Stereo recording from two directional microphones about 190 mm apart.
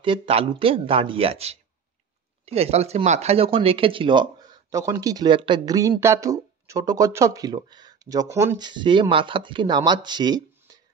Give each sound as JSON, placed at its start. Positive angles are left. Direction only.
{"t": 0.0, "sound": "speech", "side_deg": -25}